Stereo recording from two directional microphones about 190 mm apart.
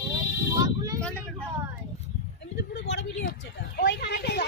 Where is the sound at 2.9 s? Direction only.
55° left (ahead or behind).